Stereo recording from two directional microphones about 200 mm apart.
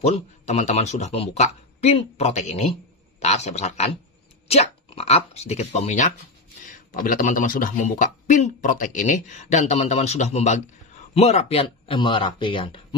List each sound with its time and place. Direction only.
0.0 s speech: 35° left (ahead or behind)